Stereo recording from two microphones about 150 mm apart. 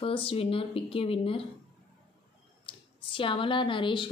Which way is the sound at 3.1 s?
35° left (ahead or behind).